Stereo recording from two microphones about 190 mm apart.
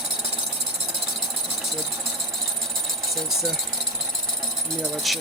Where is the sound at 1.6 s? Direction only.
Centre (ahead or behind).